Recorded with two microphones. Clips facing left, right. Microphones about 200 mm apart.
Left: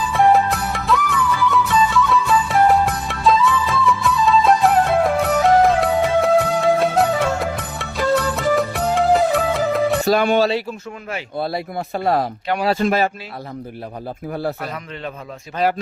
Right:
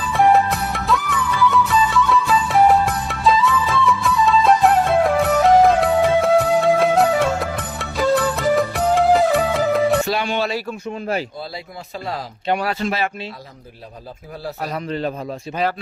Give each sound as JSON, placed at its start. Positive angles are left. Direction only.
{"t": 0.1, "sound": "music", "side_deg": 0}
{"t": 10.0, "sound": "speech", "side_deg": 45}
{"t": 11.3, "sound": "speech", "side_deg": 60}
{"t": 14.6, "sound": "a man's voice", "side_deg": -35}
{"t": 15.6, "sound": "speech", "side_deg": 0}